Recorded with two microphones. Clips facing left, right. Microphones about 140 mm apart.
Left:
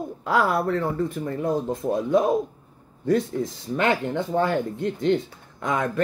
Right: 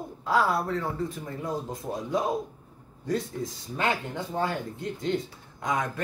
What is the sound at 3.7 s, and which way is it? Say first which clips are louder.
Speech: left 7 dB; 65° left (ahead or behind).